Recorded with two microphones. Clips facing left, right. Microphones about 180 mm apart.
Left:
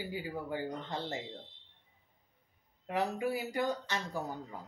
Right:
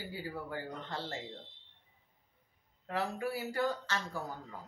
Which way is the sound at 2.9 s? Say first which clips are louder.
Left 3 dB; 15° left (ahead or behind).